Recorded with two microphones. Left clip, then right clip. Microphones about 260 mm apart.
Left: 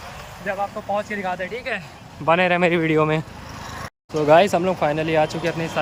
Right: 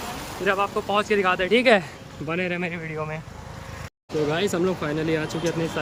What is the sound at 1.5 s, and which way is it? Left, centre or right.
Speech, right.